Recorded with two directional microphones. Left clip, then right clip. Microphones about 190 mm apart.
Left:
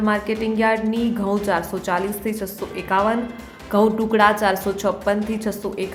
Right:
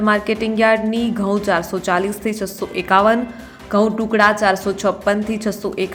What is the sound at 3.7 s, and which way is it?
A woman's voice, 5° right (ahead or behind).